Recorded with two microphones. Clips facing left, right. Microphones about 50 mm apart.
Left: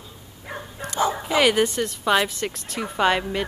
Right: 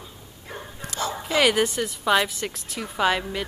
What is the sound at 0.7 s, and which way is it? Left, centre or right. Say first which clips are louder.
Dog: left 6 dB; left.